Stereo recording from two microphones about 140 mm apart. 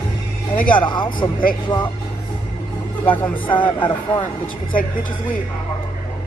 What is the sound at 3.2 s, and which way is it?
Speech, 10° left (ahead or behind).